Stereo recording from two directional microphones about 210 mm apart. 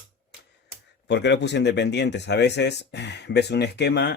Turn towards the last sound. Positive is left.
turn(degrees=55)  # may be behind; listen again after turning